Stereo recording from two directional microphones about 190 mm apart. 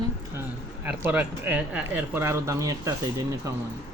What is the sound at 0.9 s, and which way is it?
Speech, 10° right (ahead or behind).